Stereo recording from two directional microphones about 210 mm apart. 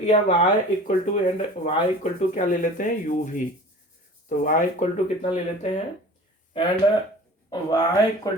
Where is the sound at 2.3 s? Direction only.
40° left (ahead or behind).